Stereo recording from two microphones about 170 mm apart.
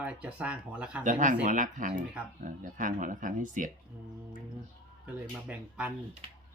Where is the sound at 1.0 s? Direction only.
50° right (ahead or behind).